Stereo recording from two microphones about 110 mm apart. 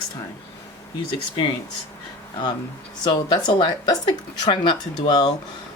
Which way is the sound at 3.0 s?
45° left (ahead or behind).